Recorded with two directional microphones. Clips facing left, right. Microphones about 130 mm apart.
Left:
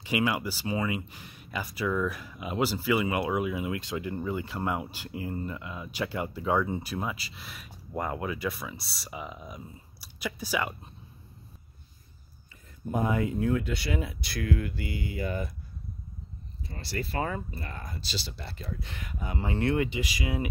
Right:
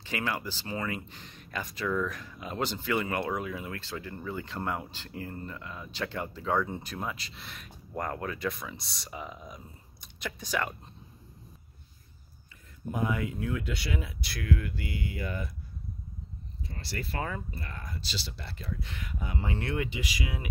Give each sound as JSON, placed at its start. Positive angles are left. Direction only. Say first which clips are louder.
{"t": 0.0, "sound": "speech", "louder": "left 5 dB", "side_deg": 10}
{"t": 12.9, "sound": "speech", "louder": "left 4 dB", "side_deg": 35}
{"t": 17.1, "sound": "speech", "louder": "left 3 dB", "side_deg": 30}